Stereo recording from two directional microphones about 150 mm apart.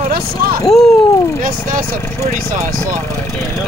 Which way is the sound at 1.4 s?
65° right (ahead or behind).